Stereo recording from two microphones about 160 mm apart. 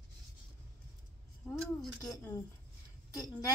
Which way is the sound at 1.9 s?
20° left (ahead or behind).